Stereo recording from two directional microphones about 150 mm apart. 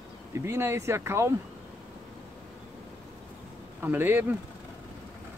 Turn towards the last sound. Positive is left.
turn(degrees=-15)  # may be behind; listen again after turning